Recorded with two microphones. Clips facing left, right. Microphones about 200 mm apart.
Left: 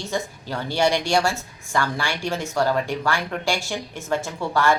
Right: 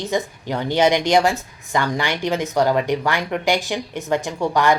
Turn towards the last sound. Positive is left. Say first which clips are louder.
# right 3 dB
turn(degrees=-15)  # may be behind; listen again after turning